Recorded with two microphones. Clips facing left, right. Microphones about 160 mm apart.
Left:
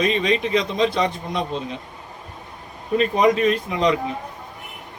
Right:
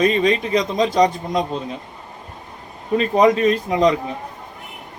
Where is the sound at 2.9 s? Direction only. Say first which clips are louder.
Right 2 dB; 35° right (ahead or behind).